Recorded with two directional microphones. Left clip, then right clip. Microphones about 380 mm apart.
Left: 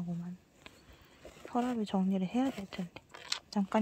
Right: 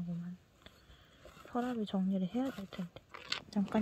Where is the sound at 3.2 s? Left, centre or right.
Centre.